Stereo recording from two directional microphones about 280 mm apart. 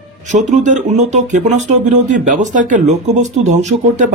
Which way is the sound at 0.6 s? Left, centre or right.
Right.